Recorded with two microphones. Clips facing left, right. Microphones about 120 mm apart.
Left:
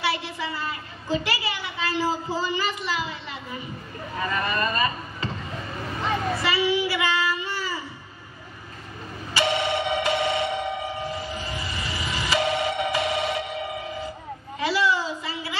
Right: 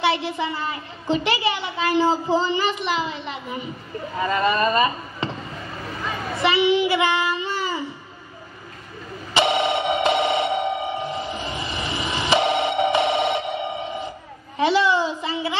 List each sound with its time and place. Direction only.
0.0 s a woman's voice: 25° right (ahead or behind)
6.3 s child singing: 25° right (ahead or behind)
9.3 s doorbell: 25° right (ahead or behind)
14.6 s a sound: 25° right (ahead or behind)